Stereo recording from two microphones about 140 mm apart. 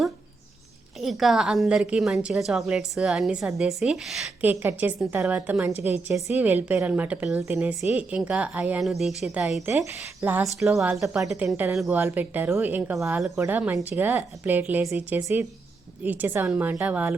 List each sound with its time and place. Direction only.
0.9 s a woman's voice: centre (ahead or behind)
4.4 s a woman's voice: 10° right (ahead or behind)
10.2 s a woman's voice: 15° right (ahead or behind)
10.6 s a woman's voice: centre (ahead or behind)
11.9 s a woman's voice: 15° right (ahead or behind)